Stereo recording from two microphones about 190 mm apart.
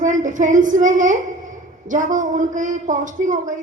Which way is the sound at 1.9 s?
40° right (ahead or behind).